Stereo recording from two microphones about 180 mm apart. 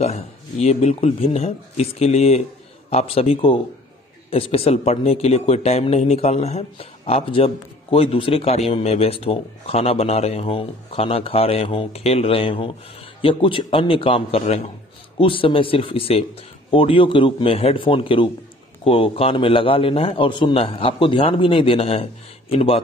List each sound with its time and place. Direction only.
0.0 s speech: 35° left (ahead or behind)